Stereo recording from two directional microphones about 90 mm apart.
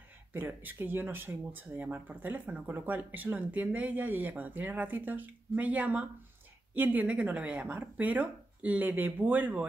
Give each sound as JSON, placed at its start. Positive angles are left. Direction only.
{"t": 0.3, "sound": "speech", "side_deg": -25}